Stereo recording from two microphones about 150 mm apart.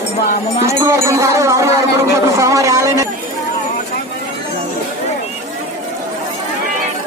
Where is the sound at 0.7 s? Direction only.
20° right (ahead or behind).